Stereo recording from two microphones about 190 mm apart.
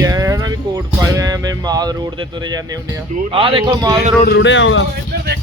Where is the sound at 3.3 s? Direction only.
30° right (ahead or behind).